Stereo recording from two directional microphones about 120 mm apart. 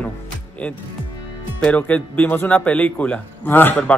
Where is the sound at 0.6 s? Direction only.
10° left (ahead or behind).